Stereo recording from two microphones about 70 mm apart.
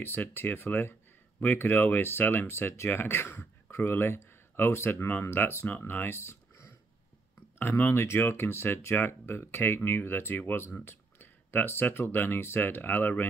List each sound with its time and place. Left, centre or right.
0.0 s speech: left
6.1 s a sound: left
7.5 s speech: left